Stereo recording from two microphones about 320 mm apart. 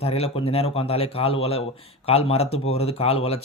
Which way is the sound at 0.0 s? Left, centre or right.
Centre.